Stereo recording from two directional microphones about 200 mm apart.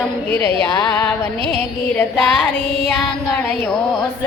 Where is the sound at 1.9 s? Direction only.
5° left (ahead or behind).